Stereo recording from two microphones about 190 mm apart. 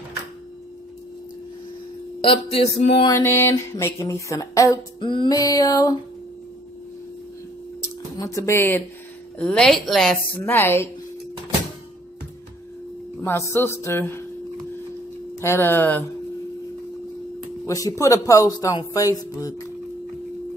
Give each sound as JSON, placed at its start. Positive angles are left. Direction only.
{"t": 2.5, "sound": "a sound", "side_deg": 30}
{"t": 3.1, "sound": "speech", "side_deg": 10}
{"t": 8.2, "sound": "a woman's voice", "side_deg": 15}
{"t": 13.2, "sound": "speech", "side_deg": 15}
{"t": 15.4, "sound": "speech", "side_deg": 10}
{"t": 17.6, "sound": "speech", "side_deg": 15}